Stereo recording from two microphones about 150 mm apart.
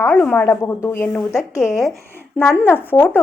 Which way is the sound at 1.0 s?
5° left (ahead or behind).